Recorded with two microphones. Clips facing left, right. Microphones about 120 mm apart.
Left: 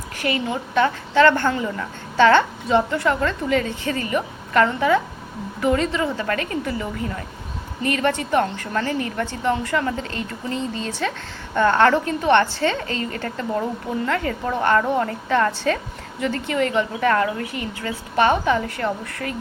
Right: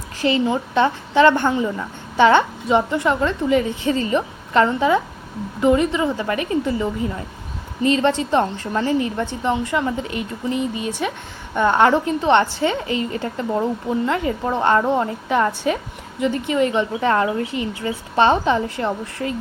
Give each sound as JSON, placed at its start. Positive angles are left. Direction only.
{"t": 0.2, "sound": "a woman's voice", "side_deg": -25}